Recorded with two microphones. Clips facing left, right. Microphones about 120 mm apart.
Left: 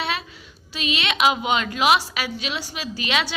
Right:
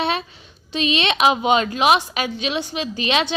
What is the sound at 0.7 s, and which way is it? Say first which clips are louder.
A woman's voice: right 6 dB; 25° right (ahead or behind).